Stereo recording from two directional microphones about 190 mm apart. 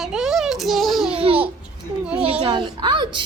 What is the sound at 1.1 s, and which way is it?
Babbling, 30° right (ahead or behind).